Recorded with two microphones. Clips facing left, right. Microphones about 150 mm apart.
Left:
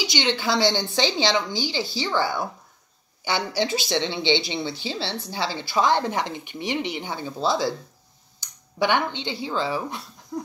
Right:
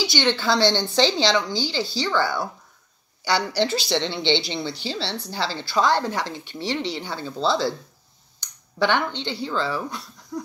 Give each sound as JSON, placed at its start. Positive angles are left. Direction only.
{"t": 0.0, "sound": "speech", "side_deg": 20}
{"t": 8.7, "sound": "speech", "side_deg": 15}